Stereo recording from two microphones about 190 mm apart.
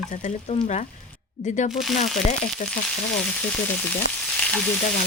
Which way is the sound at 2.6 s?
45° left (ahead or behind).